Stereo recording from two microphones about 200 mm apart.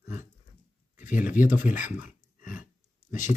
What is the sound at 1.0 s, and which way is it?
Speech, 40° left (ahead or behind).